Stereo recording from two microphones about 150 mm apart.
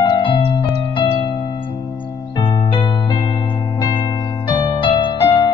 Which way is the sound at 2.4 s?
30° left (ahead or behind).